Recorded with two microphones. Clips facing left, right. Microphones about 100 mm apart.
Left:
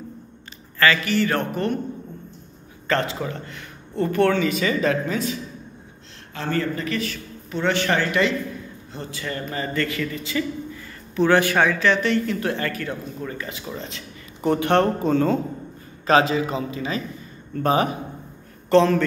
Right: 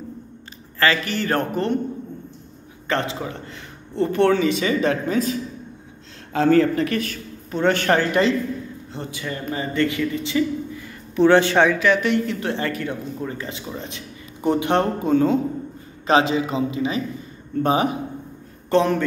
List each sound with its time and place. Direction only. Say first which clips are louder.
0.7 s a man's voice: left 1 dB; 35° right (ahead or behind)
2.9 s speech: left 1 dB; 20° right (ahead or behind)
6.5 s speech: right 7 dB; 90° right
6.9 s speech: right 2 dB; 50° right (ahead or behind)
8.9 s speech: even; 15° right (ahead or behind)
16.1 s a man's voice: even; 25° right (ahead or behind)